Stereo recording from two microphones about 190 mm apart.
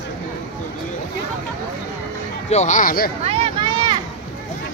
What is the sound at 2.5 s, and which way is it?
Speech, 40° left (ahead or behind).